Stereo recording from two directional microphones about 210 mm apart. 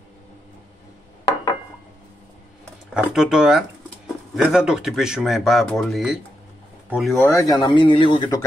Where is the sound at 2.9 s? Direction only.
5° right (ahead or behind).